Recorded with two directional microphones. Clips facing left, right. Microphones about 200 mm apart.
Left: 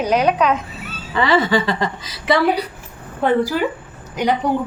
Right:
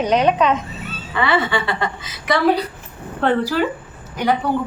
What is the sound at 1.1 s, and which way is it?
A woman's voice, 35° left (ahead or behind).